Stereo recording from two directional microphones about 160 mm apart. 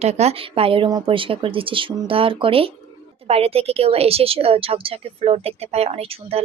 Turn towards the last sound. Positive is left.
turn(degrees=-40)  # may be behind; listen again after turning